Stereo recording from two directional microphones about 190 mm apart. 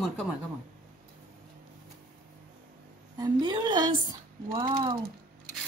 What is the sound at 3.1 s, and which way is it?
Speech, 20° right (ahead or behind).